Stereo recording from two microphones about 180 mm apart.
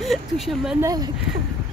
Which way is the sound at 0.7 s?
20° right (ahead or behind).